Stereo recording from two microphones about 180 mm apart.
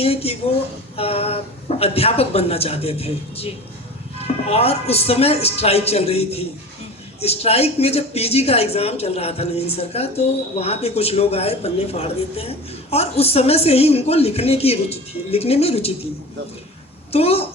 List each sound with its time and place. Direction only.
0.0 s a woman's voice: 35° left (ahead or behind)
17.1 s a woman's voice: 35° left (ahead or behind)